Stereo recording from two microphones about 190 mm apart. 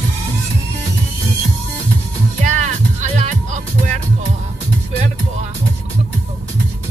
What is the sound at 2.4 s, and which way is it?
Music, 40° right (ahead or behind).